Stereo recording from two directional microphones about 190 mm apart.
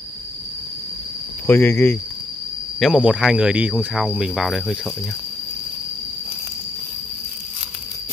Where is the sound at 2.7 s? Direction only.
Centre (ahead or behind).